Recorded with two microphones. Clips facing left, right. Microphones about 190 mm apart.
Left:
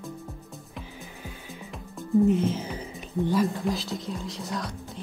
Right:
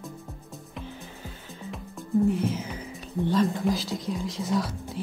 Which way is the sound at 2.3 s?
25° left (ahead or behind).